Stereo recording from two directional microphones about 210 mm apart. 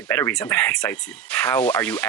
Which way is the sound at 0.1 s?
10° left (ahead or behind).